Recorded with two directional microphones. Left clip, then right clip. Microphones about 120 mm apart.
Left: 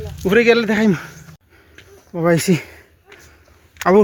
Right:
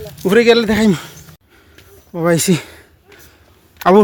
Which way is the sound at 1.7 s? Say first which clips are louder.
Right 1 dB; 5° right (ahead or behind).